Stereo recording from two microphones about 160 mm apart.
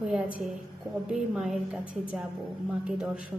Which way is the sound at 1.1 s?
5° right (ahead or behind).